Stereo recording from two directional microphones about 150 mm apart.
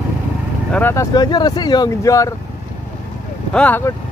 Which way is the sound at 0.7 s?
15° left (ahead or behind).